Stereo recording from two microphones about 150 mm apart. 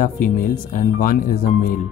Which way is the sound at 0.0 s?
65° left (ahead or behind).